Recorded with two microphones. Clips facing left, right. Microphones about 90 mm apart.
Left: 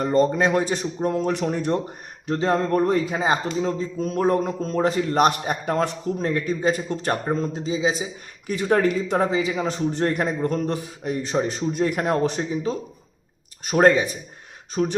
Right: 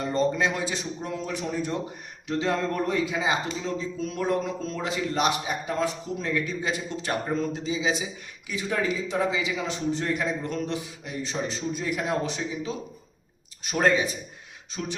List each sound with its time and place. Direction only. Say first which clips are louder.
0.0 s a man's voice: left 5 dB; 55° left (ahead or behind)
2.2 s a man's voice: left 4 dB; 40° left (ahead or behind); by 5.9 s 60° left (ahead or behind)
6.1 s a man's voice: left 6 dB; 45° left (ahead or behind)
7.3 s a man's voice: left 3 dB; 35° left (ahead or behind)
8.4 s a man's voice: left 7 dB; 55° left (ahead or behind)